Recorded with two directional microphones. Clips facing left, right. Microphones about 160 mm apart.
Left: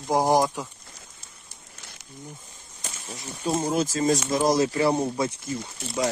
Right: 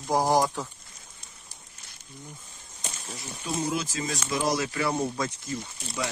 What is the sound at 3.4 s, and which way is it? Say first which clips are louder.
Speech: left 5 dB; 40° left (ahead or behind).